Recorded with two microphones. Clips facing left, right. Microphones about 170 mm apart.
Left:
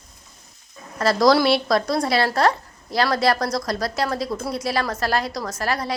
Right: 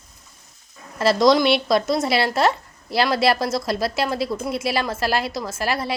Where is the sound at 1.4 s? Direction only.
Centre (ahead or behind).